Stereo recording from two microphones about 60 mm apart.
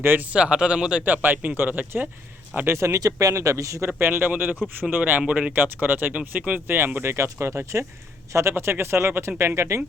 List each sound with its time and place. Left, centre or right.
0.0 s speech: right
0.3 s speech: centre
1.0 s speech: right
2.7 s speech: right
3.2 s speech: right
4.0 s speech: right
5.3 s speech: centre
5.5 s speech: right
6.7 s speech: right